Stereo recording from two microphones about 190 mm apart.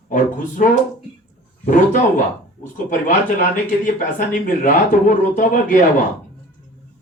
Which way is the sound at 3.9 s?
45° left (ahead or behind).